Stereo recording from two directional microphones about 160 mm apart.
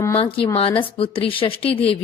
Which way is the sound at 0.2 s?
35° left (ahead or behind).